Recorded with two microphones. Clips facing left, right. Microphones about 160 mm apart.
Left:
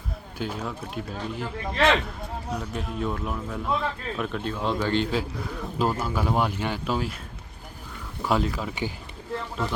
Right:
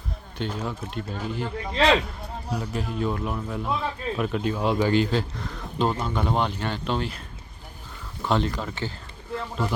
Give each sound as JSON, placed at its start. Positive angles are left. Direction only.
{"t": 0.3, "sound": "a man's voice", "side_deg": 5}
{"t": 1.7, "sound": "speech", "side_deg": -15}
{"t": 2.0, "sound": "a man's voice", "side_deg": -5}
{"t": 8.2, "sound": "a man's voice", "side_deg": 5}